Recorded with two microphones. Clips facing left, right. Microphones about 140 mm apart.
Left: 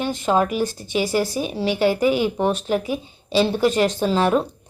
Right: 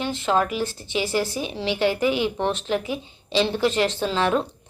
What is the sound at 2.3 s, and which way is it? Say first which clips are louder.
Speech: left 3 dB; 10° left (ahead or behind).